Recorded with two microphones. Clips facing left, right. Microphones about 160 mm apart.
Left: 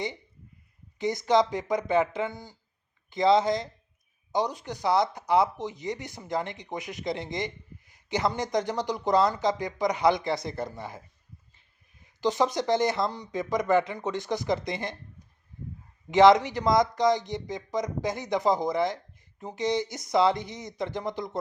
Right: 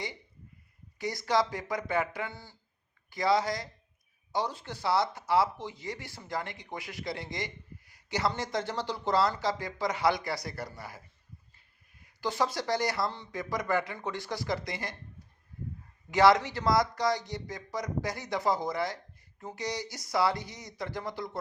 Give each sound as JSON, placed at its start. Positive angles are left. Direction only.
{"t": 0.9, "sound": "speech", "side_deg": 20}
{"t": 12.0, "sound": "speech", "side_deg": 20}
{"t": 16.0, "sound": "speech", "side_deg": 20}